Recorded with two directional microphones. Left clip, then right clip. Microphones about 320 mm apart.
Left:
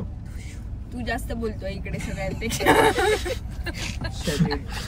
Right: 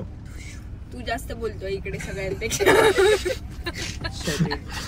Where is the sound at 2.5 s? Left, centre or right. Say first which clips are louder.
Right 1 dB; centre.